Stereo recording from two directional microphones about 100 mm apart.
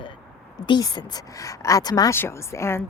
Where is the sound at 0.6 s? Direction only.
45° left (ahead or behind).